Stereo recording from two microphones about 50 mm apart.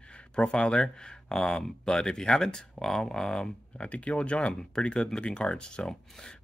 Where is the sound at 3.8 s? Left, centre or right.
Left.